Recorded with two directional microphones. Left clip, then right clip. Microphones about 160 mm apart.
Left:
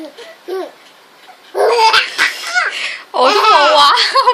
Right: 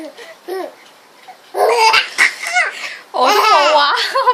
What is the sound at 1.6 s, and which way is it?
Babbling, 20° right (ahead or behind).